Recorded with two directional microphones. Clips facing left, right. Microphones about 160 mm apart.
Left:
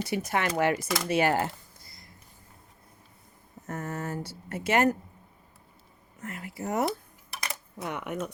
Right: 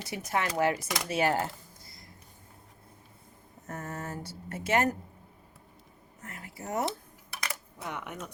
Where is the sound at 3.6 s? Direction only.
75° left (ahead or behind).